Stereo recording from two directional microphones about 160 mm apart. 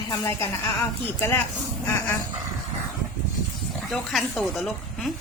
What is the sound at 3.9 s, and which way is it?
Speech, centre (ahead or behind).